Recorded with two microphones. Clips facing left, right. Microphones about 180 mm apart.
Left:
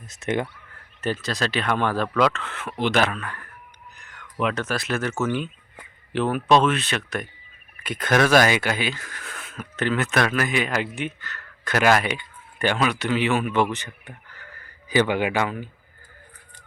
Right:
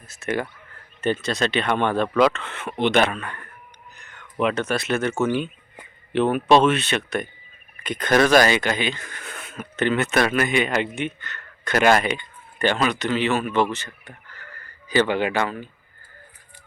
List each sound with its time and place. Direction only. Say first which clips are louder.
0.1 s speech: left 1 dB; 20° left (ahead or behind)
1.0 s speech: right 3 dB; centre (ahead or behind)